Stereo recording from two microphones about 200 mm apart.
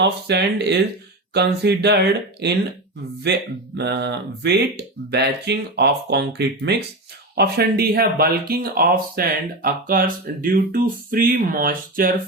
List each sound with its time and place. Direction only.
0.0 s speech: 55° right (ahead or behind)
3.8 s speech: 55° right (ahead or behind)